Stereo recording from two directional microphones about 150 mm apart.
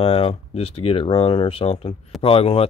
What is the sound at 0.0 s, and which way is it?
Speech, 40° left (ahead or behind).